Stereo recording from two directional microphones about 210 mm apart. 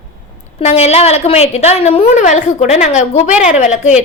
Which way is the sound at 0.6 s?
30° left (ahead or behind).